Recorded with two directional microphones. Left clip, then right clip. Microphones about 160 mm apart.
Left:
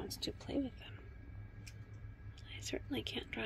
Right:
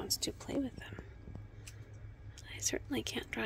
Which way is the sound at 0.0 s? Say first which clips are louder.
Right 5 dB; 20° right (ahead or behind).